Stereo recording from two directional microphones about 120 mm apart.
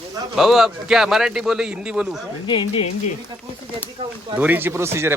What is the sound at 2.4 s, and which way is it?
Speech, 45° left (ahead or behind).